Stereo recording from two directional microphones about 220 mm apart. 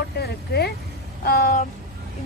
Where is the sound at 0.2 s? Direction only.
45° left (ahead or behind).